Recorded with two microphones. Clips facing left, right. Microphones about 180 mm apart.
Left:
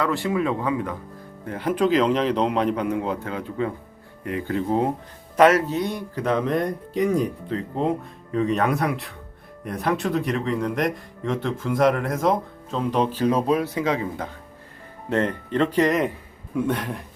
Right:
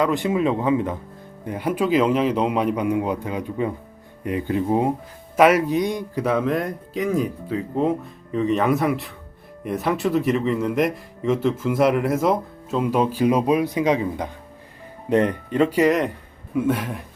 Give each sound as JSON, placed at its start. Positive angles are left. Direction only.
{"t": 0.0, "sound": "a man's voice", "side_deg": -20}